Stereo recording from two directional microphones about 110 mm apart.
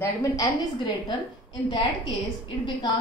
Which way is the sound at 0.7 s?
45° left (ahead or behind).